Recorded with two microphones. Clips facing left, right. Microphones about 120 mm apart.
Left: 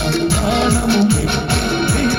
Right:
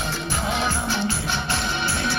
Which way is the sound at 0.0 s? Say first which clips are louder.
Left 10 dB; 75° left (ahead or behind).